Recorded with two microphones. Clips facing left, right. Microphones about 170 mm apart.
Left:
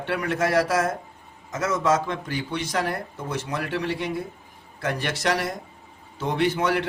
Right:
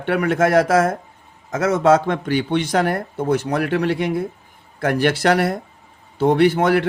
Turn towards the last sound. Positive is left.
turn(degrees=-60)  # may be behind; listen again after turning